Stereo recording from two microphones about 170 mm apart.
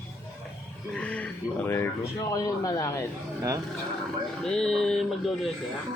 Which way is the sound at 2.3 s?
20° left (ahead or behind).